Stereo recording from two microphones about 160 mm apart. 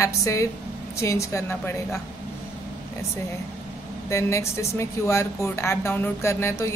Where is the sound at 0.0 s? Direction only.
20° left (ahead or behind).